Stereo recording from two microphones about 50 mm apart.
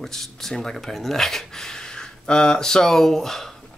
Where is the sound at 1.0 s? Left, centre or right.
Centre.